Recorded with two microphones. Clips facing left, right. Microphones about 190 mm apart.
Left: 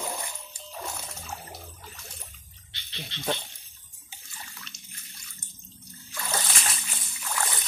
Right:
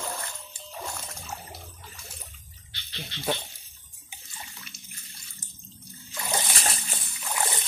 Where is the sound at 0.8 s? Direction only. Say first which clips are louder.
Even; centre (ahead or behind).